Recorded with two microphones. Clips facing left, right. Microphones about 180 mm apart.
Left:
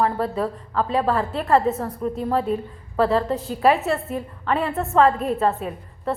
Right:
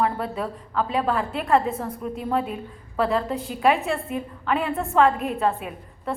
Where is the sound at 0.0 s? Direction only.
Centre (ahead or behind).